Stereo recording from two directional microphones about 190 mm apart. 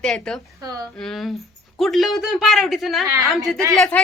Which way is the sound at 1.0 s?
Centre (ahead or behind).